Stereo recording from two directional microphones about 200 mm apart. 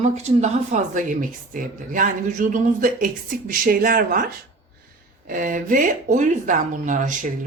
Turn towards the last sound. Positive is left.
turn(degrees=-40)  # may be behind; listen again after turning